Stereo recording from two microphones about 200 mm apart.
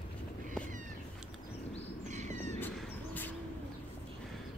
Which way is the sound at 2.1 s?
35° right (ahead or behind).